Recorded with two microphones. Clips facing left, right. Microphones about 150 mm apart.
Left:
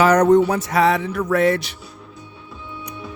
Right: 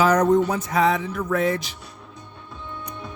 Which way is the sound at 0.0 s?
75° left (ahead or behind).